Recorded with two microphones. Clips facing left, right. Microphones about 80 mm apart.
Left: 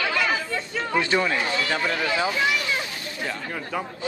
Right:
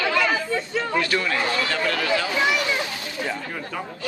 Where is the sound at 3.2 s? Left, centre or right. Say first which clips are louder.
Right 1 dB; centre.